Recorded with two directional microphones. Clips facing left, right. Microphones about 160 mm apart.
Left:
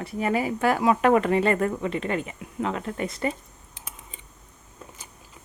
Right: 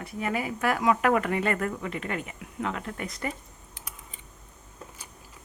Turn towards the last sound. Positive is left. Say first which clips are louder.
# left 1 dB
turn(degrees=25)  # may be behind; listen again after turning